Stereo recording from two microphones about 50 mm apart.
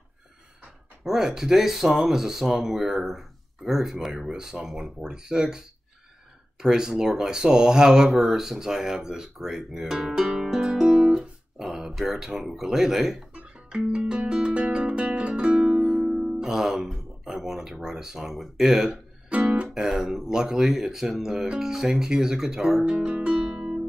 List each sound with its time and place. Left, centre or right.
1.0 s speech: centre
5.0 s speech: centre
6.6 s speech: centre
13.3 s music: centre
16.4 s speech: centre
18.9 s music: right
19.7 s speech: centre
22.8 s music: right
23.5 s music: centre